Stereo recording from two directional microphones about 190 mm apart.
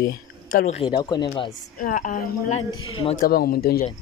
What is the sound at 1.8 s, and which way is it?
Speech, 45° left (ahead or behind).